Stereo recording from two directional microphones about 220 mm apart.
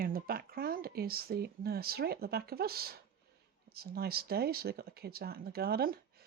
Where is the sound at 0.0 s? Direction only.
40° right (ahead or behind).